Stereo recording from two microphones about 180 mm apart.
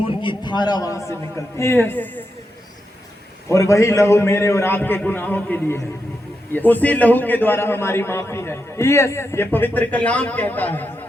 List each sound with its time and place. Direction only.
0.0 s a man's voice: 30° left (ahead or behind); by 2.2 s 10° left (ahead or behind)
3.5 s a man's voice: 15° left (ahead or behind)